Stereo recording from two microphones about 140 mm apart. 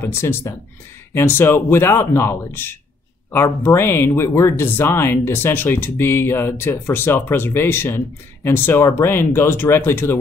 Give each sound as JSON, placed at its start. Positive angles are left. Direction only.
{"t": 0.0, "sound": "speech", "side_deg": 15}